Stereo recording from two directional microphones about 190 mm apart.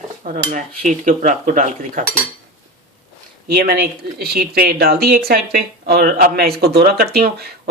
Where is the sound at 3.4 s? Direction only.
55° right (ahead or behind).